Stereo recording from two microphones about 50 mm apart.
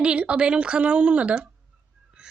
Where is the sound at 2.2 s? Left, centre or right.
Centre.